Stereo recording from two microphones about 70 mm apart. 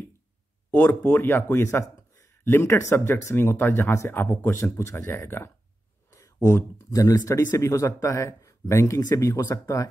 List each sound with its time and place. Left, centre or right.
0.7 s a man's voice: left
6.1 s speech: left